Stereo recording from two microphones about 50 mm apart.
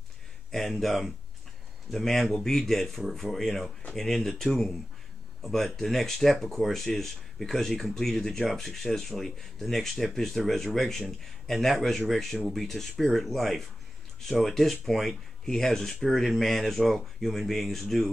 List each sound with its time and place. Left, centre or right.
0.5 s speech: centre